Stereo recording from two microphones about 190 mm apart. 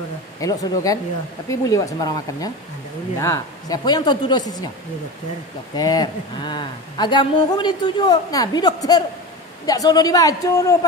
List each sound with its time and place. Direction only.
0.4 s speech: 20° left (ahead or behind)
5.8 s speech: 20° left (ahead or behind)